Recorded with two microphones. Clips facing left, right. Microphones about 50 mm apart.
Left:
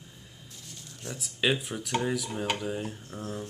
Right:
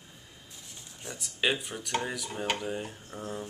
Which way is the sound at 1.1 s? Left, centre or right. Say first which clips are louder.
Left 2 dB; centre.